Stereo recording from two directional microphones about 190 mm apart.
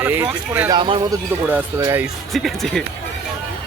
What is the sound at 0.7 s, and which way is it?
Speech, 25° right (ahead or behind).